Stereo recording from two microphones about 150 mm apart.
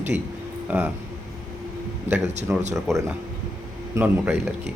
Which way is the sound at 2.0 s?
50° right (ahead or behind).